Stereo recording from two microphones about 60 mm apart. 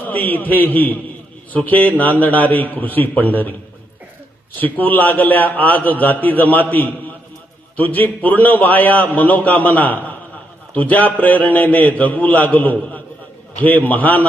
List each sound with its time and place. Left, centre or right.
0.0 s a man's voice: left
4.5 s a man's voice: left